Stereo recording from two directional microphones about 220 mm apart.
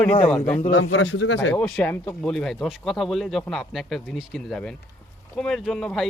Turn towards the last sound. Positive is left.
turn(degrees=0)  # may be behind; listen again after turning